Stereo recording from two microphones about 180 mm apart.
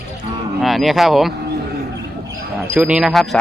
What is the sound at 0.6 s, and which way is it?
Speech, centre (ahead or behind).